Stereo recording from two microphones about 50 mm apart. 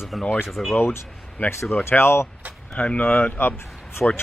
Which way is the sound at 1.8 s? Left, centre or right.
Left.